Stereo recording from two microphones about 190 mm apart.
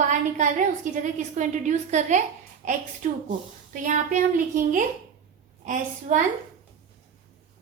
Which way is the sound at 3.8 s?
40° right (ahead or behind).